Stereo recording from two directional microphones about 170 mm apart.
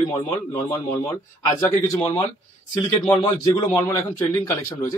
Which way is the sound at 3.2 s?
30° left (ahead or behind).